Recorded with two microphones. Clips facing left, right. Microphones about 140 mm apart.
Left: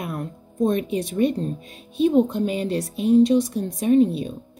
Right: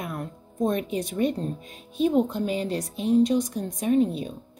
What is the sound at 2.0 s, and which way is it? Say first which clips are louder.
A woman's voice: left 4 dB; 20° left (ahead or behind).